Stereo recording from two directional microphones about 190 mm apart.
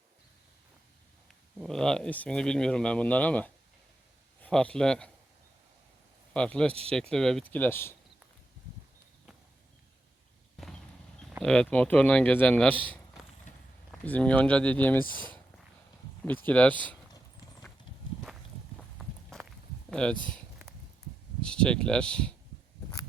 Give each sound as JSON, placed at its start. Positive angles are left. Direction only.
{"t": 1.5, "sound": "a man's voice", "side_deg": 0}
{"t": 6.3, "sound": "speech", "side_deg": 5}
{"t": 11.3, "sound": "a man's voice", "side_deg": 0}
{"t": 16.5, "sound": "speech", "side_deg": 5}
{"t": 18.8, "sound": "walk", "side_deg": 5}
{"t": 19.9, "sound": "speech", "side_deg": 5}
{"t": 21.4, "sound": "speech", "side_deg": 5}